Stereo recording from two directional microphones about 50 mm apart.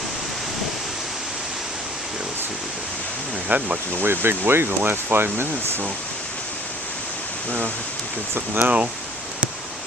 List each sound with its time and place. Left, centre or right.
3.5 s speech: right
8.5 s speech: right